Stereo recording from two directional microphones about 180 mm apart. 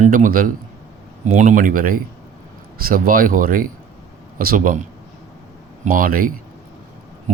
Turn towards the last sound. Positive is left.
turn(degrees=-50)  # may be behind; listen again after turning